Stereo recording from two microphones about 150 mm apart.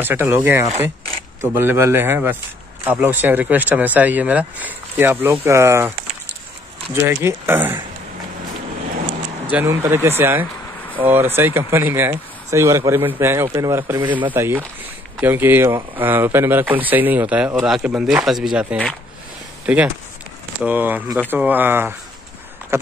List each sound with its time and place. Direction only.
0.0 s speech: 15° right (ahead or behind)
9.5 s speech: 15° right (ahead or behind)